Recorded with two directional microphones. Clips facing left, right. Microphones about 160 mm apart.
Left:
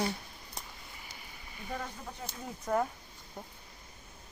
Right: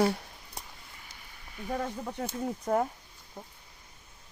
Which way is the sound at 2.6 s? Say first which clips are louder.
Right 2 dB; 30° right (ahead or behind).